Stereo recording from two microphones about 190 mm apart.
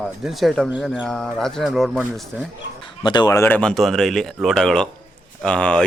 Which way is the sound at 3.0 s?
25° left (ahead or behind).